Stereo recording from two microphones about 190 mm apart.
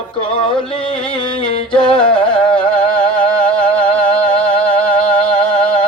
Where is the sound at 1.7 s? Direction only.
25° left (ahead or behind).